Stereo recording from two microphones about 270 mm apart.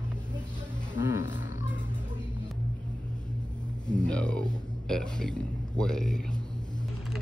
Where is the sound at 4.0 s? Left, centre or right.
Centre.